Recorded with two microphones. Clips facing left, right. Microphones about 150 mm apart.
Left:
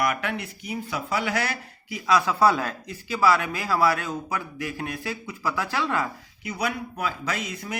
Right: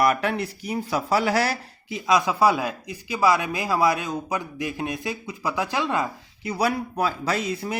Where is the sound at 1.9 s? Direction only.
20° right (ahead or behind).